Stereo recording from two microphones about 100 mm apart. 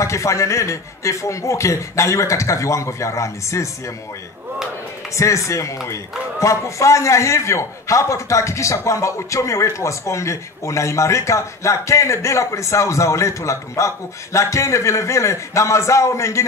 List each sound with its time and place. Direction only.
0.0 s a man's voice: 30° left (ahead or behind)
5.1 s a man's voice: 30° left (ahead or behind)